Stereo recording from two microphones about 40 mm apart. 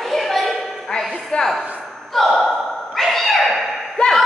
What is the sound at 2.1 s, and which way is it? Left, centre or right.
Gasp, centre.